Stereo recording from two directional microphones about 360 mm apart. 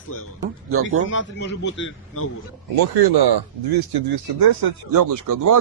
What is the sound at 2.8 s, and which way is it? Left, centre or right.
Speech, right.